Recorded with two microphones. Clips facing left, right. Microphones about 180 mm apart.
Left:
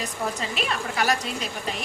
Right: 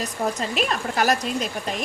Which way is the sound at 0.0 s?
45° right (ahead or behind).